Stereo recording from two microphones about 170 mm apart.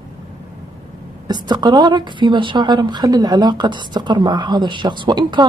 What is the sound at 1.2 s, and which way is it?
Speech, 25° right (ahead or behind).